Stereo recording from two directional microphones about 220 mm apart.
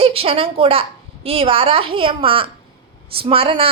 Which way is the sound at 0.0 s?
25° right (ahead or behind).